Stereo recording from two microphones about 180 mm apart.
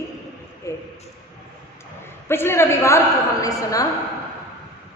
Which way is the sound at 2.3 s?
15° left (ahead or behind).